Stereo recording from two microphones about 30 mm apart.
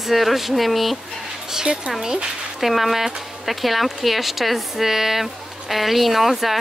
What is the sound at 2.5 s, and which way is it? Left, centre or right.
Speech, centre.